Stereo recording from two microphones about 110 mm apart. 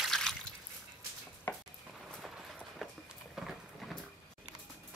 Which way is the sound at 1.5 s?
15° left (ahead or behind).